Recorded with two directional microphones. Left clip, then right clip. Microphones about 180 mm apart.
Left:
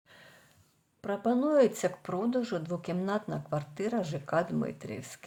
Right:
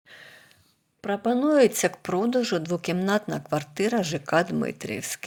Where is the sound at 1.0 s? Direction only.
15° right (ahead or behind).